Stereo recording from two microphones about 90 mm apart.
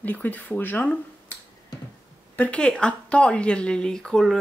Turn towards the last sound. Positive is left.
turn(degrees=5)  # may be behind; listen again after turning